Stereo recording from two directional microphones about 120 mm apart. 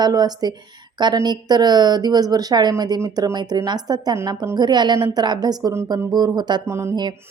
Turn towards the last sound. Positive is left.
turn(degrees=-25)  # may be behind; listen again after turning